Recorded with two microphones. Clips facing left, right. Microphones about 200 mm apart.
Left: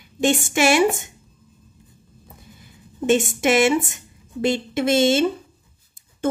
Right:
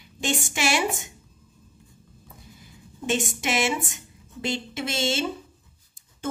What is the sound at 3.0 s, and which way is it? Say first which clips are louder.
A woman's voice: left 9 dB; 55° left (ahead or behind).